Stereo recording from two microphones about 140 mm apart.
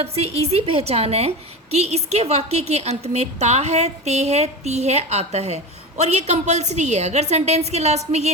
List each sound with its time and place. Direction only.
0.0 s a woman's voice: 45° right (ahead or behind)